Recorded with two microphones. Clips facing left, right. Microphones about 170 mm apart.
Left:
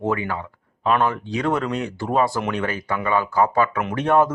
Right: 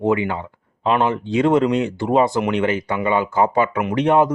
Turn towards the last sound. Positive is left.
turn(degrees=-15)  # may be behind; listen again after turning